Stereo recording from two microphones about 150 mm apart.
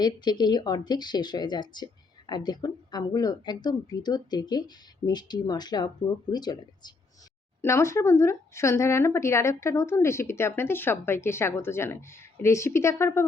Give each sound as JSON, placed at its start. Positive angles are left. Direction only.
{"t": 0.0, "sound": "a woman's voice", "side_deg": 30}